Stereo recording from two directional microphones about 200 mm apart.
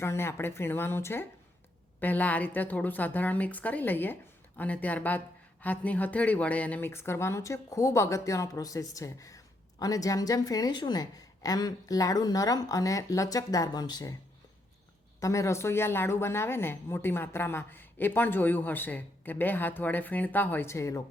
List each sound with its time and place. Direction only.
0.0 s speech: 10° left (ahead or behind)
15.2 s speech: 15° left (ahead or behind)